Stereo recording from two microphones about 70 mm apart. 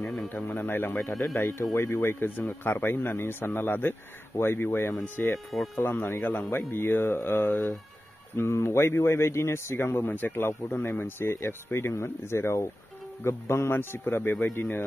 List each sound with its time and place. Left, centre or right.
0.0 s a man's voice: centre
0.3 s speech: left
0.9 s speech: centre
1.3 s speech: left
5.3 s speech: centre
5.8 s speech: left